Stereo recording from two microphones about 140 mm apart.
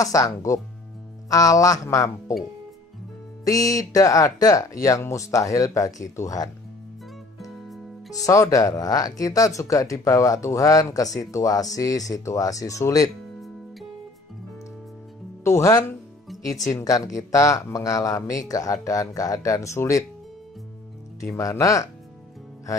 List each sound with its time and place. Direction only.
0.0 s speech: 25° left (ahead or behind)
3.4 s speech: 25° left (ahead or behind)
7.3 s music: centre (ahead or behind)
8.3 s speech: 25° left (ahead or behind)
15.4 s speech: 20° left (ahead or behind)
21.4 s speech: 20° left (ahead or behind)